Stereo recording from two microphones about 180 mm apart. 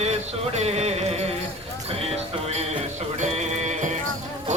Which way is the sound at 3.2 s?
40° right (ahead or behind).